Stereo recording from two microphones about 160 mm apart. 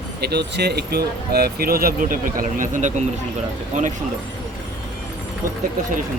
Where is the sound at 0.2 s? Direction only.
90° right; by 3.0 s 50° right (ahead or behind).